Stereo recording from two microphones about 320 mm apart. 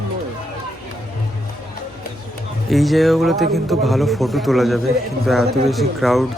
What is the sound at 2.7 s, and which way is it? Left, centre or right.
A man's voice, centre.